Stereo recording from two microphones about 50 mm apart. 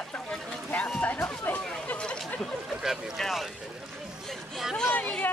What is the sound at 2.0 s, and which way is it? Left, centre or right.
Chatter, left.